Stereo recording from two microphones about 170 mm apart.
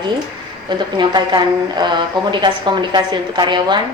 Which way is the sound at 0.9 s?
25° right (ahead or behind).